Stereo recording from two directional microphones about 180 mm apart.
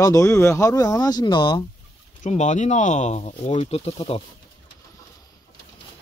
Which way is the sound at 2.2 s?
40° left (ahead or behind).